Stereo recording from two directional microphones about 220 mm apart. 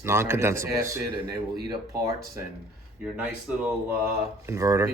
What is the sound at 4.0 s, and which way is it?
Speech, 10° right (ahead or behind).